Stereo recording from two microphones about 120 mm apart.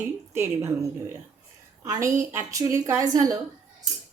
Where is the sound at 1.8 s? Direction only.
25° right (ahead or behind).